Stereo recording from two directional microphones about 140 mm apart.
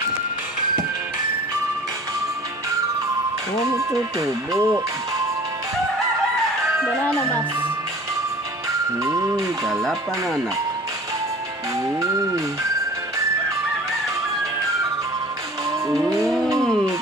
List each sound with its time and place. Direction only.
3.8 s speech: 20° right (ahead or behind)
9.0 s speech: 20° right (ahead or behind)
9.8 s speech: centre (ahead or behind)
16.2 s vehicle: centre (ahead or behind)